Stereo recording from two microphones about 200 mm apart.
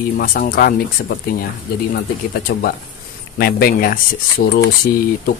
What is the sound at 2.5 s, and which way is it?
Speech, 50° left (ahead or behind).